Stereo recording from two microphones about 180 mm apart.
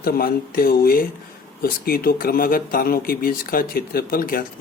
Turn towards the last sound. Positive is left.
turn(degrees=55)  # may be behind; listen again after turning